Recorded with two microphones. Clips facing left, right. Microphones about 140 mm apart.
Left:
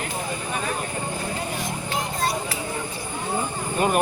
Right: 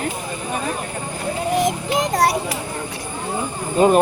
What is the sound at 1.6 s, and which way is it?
Speech, 85° right.